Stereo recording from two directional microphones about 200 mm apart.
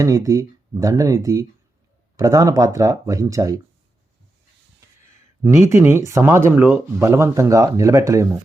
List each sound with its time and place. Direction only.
0.0 s speech: 15° right (ahead or behind)
5.4 s speech: 15° right (ahead or behind)